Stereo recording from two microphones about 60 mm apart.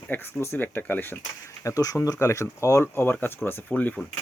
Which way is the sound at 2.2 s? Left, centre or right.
Left.